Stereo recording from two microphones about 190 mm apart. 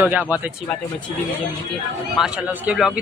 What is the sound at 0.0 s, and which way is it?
Speech, 5° right (ahead or behind).